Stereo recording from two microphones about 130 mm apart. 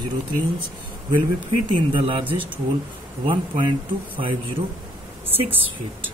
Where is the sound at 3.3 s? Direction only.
40° right (ahead or behind).